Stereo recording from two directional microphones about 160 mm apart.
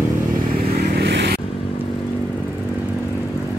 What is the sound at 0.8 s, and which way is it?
Vehicle, 90° right.